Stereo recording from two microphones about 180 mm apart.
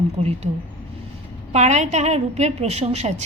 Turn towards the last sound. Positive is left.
turn(degrees=-35)  # may be behind; listen again after turning